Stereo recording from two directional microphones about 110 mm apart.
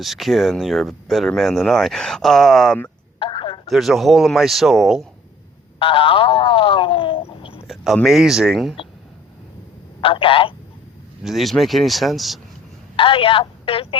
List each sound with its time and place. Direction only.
0.0 s speech: centre (ahead or behind)
3.2 s telephone: 45° left (ahead or behind)
3.7 s speech: centre (ahead or behind)
5.8 s a sound: 55° left (ahead or behind)
8.0 s speech: centre (ahead or behind)
10.0 s speech: 55° left (ahead or behind)
11.2 s speech: centre (ahead or behind)
13.0 s speech: 55° left (ahead or behind)